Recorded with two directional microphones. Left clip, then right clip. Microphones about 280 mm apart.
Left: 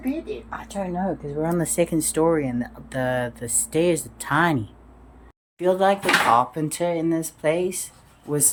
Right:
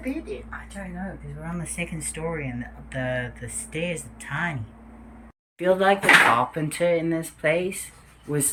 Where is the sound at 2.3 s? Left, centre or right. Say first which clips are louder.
Left 9 dB; centre.